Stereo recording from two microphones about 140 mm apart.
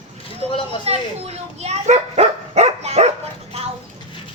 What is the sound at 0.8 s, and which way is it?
Bow-wow, 45° right (ahead or behind).